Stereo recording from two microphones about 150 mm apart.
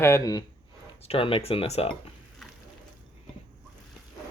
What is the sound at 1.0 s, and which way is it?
Speech, 40° left (ahead or behind).